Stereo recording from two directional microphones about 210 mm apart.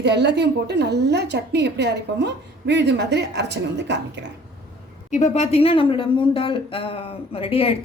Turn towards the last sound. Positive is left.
turn(degrees=25)  # may be behind; listen again after turning